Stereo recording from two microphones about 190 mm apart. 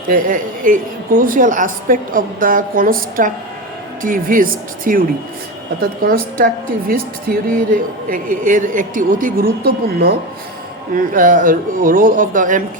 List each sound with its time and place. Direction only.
0.1 s a woman's voice: 45° right (ahead or behind)
10.9 s a woman's voice: 45° right (ahead or behind)